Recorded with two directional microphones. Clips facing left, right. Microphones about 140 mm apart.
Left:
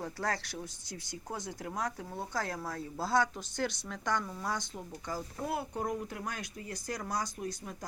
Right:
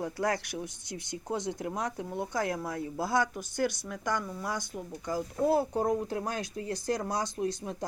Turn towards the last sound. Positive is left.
turn(degrees=-25)  # may be behind; listen again after turning